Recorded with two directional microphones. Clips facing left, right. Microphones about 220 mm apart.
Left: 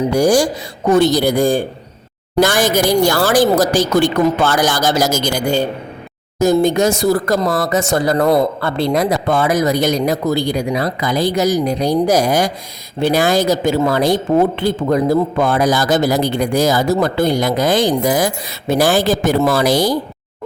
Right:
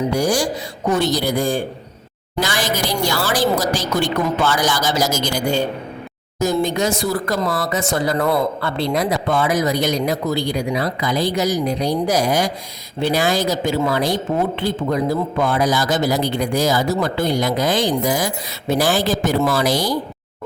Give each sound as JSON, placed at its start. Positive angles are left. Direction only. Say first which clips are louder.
{"t": 0.1, "sound": "speech", "louder": "left 6 dB", "side_deg": 45}